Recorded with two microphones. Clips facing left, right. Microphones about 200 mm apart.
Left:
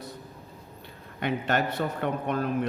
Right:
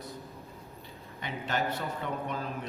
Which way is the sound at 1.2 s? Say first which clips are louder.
Left 6 dB; 65° left (ahead or behind).